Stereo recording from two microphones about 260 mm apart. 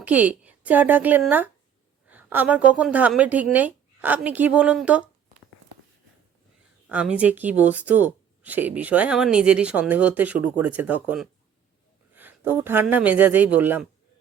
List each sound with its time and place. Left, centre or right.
0.0 s speech: centre
6.8 s speech: centre